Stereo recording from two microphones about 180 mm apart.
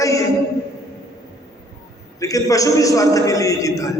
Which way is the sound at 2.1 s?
20° left (ahead or behind).